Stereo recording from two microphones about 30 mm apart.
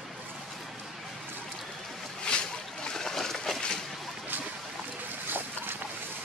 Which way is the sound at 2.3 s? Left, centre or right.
Left.